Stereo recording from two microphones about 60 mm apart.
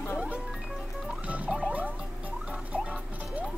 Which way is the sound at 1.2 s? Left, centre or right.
Right.